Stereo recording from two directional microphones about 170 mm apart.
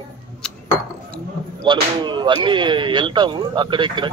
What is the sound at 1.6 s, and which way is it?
Speech, 25° right (ahead or behind).